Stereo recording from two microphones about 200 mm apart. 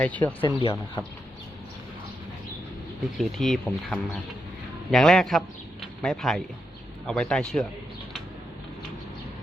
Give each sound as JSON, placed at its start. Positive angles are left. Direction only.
{"t": 0.0, "sound": "speech", "side_deg": 5}
{"t": 0.4, "sound": "speech", "side_deg": 20}
{"t": 3.2, "sound": "speech", "side_deg": 0}